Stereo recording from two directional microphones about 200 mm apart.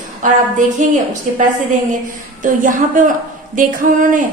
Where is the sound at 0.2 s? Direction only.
40° right (ahead or behind).